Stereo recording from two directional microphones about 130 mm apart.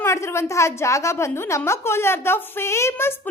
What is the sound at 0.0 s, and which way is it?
A woman's voice, 20° left (ahead or behind).